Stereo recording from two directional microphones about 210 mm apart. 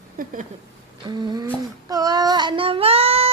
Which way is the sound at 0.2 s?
40° right (ahead or behind).